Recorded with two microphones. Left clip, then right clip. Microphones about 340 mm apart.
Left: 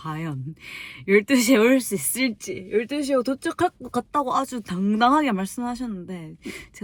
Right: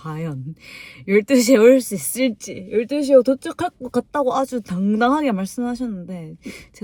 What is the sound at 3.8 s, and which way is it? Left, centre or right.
Speech, centre.